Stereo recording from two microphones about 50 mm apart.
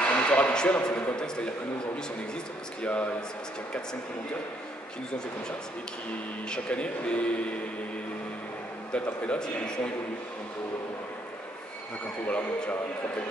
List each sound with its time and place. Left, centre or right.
0.0 s a sound: left
1.1 s a man's voice: centre
6.5 s speech: left
8.9 s speech: left
12.3 s speech: left